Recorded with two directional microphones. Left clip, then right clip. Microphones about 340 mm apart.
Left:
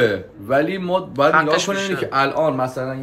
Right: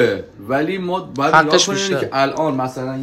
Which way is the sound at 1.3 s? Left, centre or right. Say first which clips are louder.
Right 4 dB; centre.